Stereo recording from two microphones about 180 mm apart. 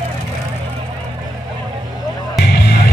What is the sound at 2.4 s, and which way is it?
Music, 65° left (ahead or behind).